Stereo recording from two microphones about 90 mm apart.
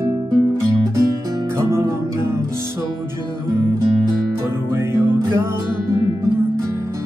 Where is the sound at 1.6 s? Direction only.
30° right (ahead or behind).